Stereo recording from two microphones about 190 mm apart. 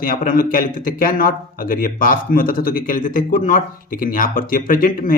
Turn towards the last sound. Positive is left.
turn(degrees=45)  # may be behind; listen again after turning